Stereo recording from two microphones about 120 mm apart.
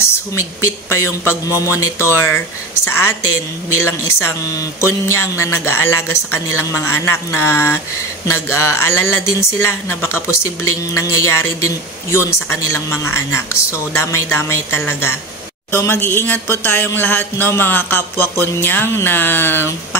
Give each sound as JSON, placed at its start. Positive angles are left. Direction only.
{"t": 0.6, "sound": "speech", "side_deg": 20}